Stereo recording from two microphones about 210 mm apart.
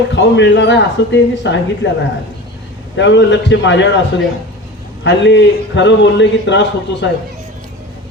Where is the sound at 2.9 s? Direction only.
55° left (ahead or behind).